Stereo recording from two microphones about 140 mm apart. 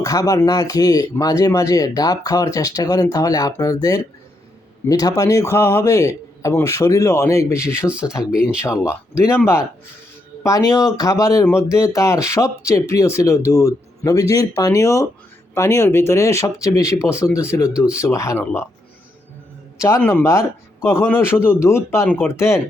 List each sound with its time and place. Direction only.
0.0 s speech: 25° left (ahead or behind)
10.4 s speech: 25° left (ahead or behind)
20.0 s a man's voice: 15° left (ahead or behind)